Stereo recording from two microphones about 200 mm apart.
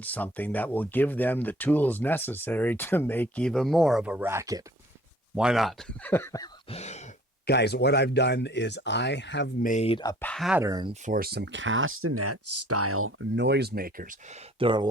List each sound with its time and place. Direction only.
0.0 s speech: 10° left (ahead or behind); by 4.6 s 15° right (ahead or behind)
5.3 s speech: 5° right (ahead or behind); by 6.5 s 15° left (ahead or behind)
6.7 s a sound: 35° left (ahead or behind)
7.4 s speech: 55° left (ahead or behind)
9.6 s a sound: 35° left (ahead or behind)
10.0 s speech: 15° left (ahead or behind)
10.2 s speech: centre (ahead or behind)
10.6 s speech: 20° right (ahead or behind)
11.0 s speech: 45° right (ahead or behind)
14.6 s speech: 25° right (ahead or behind)